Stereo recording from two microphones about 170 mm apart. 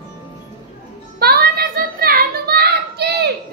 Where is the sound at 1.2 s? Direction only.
65° right (ahead or behind).